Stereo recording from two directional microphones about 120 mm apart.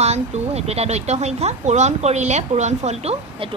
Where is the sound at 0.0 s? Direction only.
65° right (ahead or behind).